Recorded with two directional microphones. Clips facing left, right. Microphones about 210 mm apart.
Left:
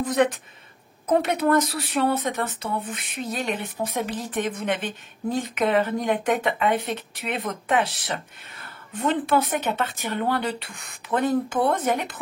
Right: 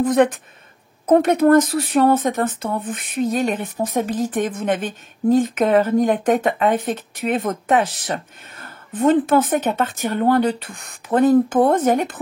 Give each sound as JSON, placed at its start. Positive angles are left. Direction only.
{"t": 0.0, "sound": "speech", "side_deg": -50}